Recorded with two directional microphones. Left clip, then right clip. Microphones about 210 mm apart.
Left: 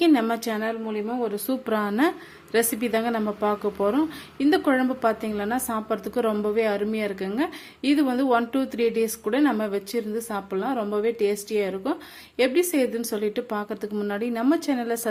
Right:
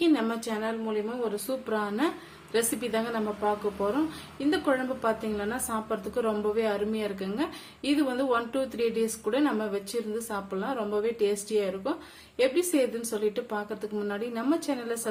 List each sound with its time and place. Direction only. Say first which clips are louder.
0.0 s a woman's voice: left 5 dB; 40° left (ahead or behind)